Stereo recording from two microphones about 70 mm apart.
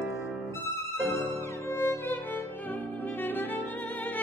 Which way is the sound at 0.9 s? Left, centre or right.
Centre.